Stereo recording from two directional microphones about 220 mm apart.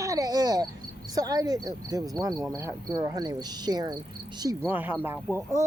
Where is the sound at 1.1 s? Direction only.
15° right (ahead or behind).